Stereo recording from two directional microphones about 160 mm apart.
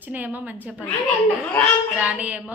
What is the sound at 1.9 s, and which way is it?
Speech, 10° right (ahead or behind).